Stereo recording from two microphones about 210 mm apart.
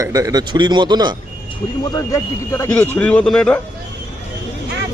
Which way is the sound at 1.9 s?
15° left (ahead or behind).